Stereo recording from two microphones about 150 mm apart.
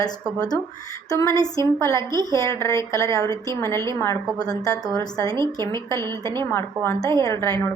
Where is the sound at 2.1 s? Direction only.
25° right (ahead or behind).